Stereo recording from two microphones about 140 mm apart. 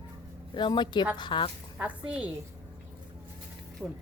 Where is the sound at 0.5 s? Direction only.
35° left (ahead or behind).